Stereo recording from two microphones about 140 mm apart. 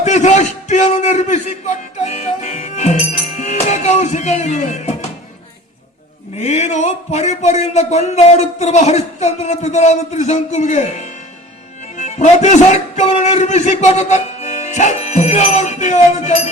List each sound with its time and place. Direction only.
0.0 s a man's voice: 55° left (ahead or behind)
6.3 s a man's voice: 50° left (ahead or behind)